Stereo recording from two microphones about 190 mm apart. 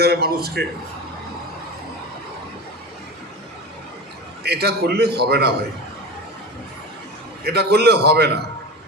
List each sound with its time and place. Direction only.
0.0 s a man's voice: 55° right (ahead or behind)
4.4 s a man's voice: 60° right (ahead or behind)
7.4 s a man's voice: 60° right (ahead or behind)